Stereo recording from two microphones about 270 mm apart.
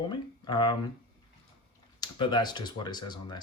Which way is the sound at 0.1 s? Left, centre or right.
Centre.